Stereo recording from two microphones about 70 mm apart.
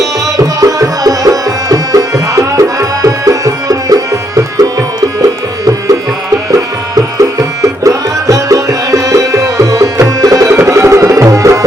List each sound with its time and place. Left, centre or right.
0.0 s music: right
10.5 s music: right